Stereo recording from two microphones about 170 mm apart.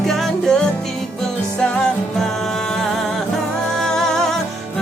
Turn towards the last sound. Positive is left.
turn(degrees=0)  # may be behind; listen again after turning